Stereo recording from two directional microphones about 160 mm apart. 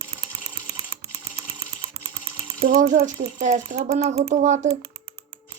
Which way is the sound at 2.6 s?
60° right (ahead or behind).